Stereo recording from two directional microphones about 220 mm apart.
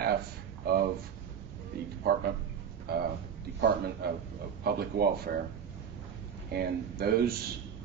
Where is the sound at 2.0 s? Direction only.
45° right (ahead or behind).